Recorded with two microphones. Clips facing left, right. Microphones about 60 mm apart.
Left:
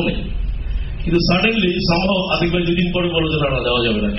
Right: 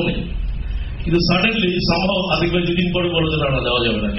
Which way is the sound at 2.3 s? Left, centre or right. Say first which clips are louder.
Even; left.